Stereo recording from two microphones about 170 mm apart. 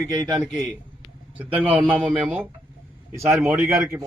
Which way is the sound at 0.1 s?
20° right (ahead or behind).